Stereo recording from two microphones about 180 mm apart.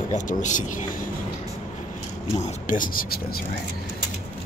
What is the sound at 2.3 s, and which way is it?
Speech, 45° left (ahead or behind).